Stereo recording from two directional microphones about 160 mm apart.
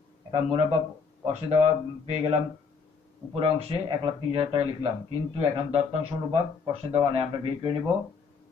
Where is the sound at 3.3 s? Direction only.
40° right (ahead or behind).